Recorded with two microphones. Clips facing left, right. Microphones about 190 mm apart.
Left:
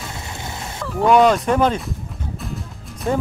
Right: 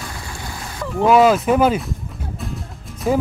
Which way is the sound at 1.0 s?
5° right (ahead or behind).